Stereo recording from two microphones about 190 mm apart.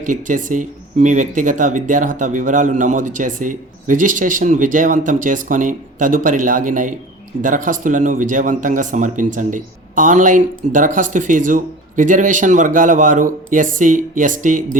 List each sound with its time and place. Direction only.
0.0 s speech: 45° right (ahead or behind)